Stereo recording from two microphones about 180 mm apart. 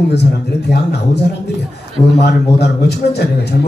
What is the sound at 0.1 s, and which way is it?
Speech, 65° left (ahead or behind).